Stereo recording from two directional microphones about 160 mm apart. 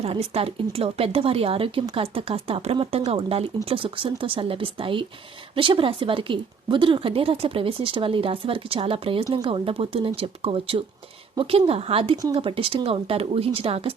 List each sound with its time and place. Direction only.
0.0 s speech: 40° right (ahead or behind)